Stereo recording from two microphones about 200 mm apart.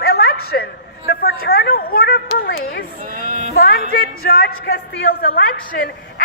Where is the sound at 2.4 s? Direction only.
50° left (ahead or behind).